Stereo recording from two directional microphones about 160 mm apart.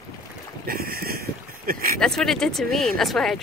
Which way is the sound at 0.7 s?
70° right (ahead or behind).